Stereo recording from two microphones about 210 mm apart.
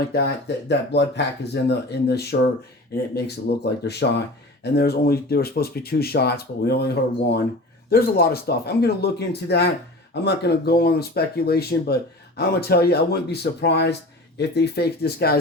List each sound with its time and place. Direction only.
0.1 s speech: 50° left (ahead or behind)